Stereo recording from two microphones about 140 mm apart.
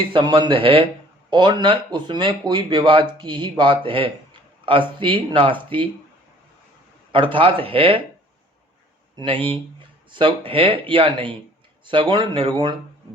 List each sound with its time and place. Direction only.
0.1 s speech: 35° right (ahead or behind)
7.3 s speech: 40° right (ahead or behind)
9.1 s speech: 40° right (ahead or behind)